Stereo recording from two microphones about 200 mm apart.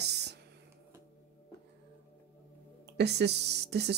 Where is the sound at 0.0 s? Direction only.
55° right (ahead or behind).